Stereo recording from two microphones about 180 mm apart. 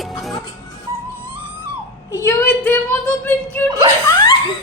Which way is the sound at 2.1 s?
10° left (ahead or behind).